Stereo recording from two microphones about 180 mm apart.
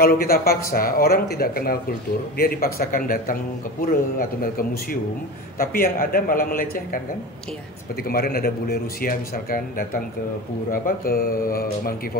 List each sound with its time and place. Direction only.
0.0 s a man's voice: 55° left (ahead or behind)
8.1 s a man's voice: 55° left (ahead or behind)